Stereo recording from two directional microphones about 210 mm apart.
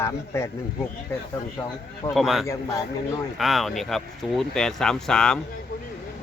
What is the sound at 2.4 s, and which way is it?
Speech, 15° left (ahead or behind).